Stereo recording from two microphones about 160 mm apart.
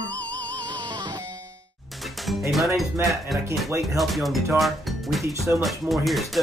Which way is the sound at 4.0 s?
Centre (ahead or behind).